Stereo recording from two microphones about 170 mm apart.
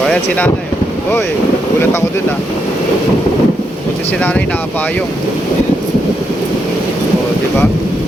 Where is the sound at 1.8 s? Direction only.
15° left (ahead or behind).